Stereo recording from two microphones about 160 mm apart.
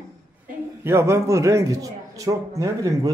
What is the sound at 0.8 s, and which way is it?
A man's voice, 15° right (ahead or behind).